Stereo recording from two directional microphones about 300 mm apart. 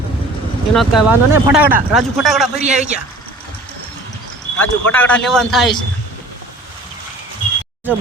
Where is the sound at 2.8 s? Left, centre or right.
Right.